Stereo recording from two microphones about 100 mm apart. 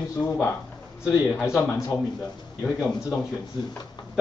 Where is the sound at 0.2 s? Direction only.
15° left (ahead or behind).